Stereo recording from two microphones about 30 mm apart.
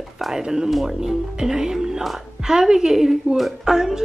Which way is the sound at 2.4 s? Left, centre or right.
Centre.